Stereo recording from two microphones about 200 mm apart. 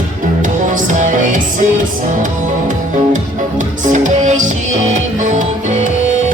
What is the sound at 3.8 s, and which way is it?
Music, 40° right (ahead or behind).